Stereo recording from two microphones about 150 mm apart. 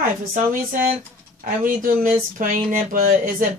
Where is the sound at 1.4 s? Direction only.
60° right (ahead or behind).